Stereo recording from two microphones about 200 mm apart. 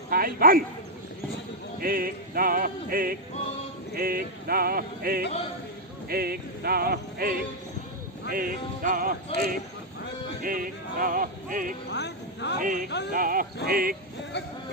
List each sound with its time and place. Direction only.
0.1 s a man's voice: 45° right (ahead or behind)
1.8 s music: 45° right (ahead or behind)
11.9 s a woman's voice: 60° left (ahead or behind)
12.5 s music: 45° right (ahead or behind)